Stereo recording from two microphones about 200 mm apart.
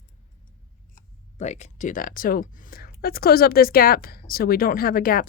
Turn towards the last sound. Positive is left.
turn(degrees=45)  # may be behind; listen again after turning